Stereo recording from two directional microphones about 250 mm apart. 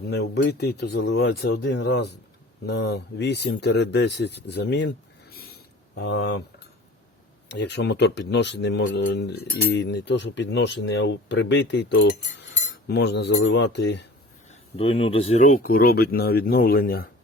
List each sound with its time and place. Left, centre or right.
0.1 s speech: left
14.5 s speech: left